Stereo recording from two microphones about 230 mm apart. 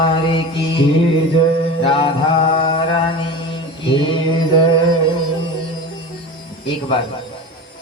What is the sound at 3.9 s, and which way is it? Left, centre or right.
Mantra, left.